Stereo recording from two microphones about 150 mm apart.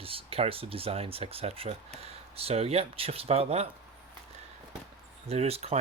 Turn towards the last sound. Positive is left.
turn(degrees=-45)  # may be behind; listen again after turning